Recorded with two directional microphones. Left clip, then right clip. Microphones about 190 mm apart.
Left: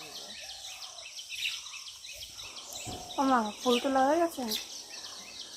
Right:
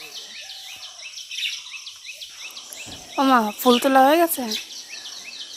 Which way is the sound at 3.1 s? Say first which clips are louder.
Right 10 dB; 85° right.